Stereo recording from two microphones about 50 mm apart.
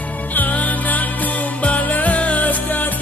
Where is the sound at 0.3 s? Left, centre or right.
Left.